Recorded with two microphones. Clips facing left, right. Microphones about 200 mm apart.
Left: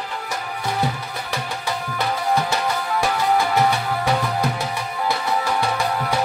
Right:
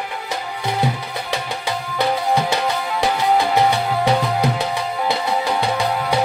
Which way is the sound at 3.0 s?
20° right (ahead or behind).